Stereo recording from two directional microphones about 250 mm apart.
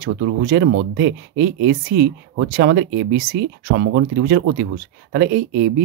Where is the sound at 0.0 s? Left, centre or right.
Right.